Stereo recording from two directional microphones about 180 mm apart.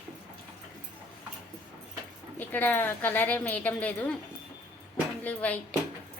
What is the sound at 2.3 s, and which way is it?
A woman's voice, 10° left (ahead or behind).